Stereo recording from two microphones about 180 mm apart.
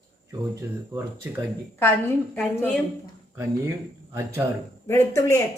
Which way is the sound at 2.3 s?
5° left (ahead or behind).